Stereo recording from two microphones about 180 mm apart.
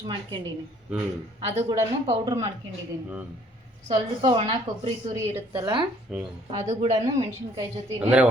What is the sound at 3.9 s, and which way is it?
A woman's voice, 30° right (ahead or behind).